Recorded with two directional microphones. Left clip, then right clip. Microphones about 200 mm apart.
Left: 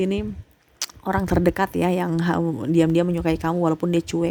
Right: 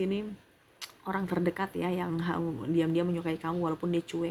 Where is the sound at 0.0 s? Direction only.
55° left (ahead or behind).